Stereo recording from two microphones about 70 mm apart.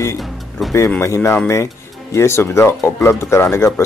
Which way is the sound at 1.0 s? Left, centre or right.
Left.